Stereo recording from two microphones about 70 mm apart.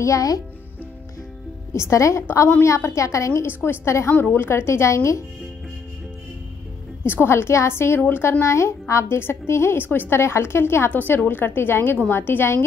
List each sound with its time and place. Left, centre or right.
0.0 s speech: left
1.7 s a woman's voice: left
7.1 s a woman's voice: left
10.9 s a woman's voice: left